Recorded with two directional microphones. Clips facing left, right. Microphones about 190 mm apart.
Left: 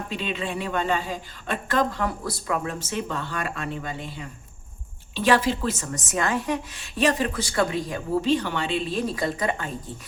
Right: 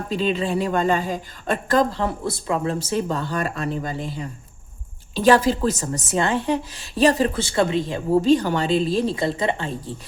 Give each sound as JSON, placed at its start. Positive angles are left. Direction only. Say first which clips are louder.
{"t": 0.1, "sound": "a woman's voice", "louder": "right 9 dB", "side_deg": -35}
{"t": 2.7, "sound": "a woman's voice", "louder": "right 6 dB", "side_deg": -35}